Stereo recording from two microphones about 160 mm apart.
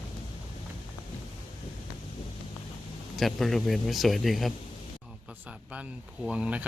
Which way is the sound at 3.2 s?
Centre (ahead or behind).